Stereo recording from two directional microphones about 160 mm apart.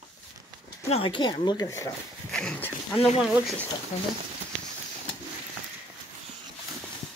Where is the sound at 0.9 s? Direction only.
35° left (ahead or behind); by 1.9 s 20° left (ahead or behind).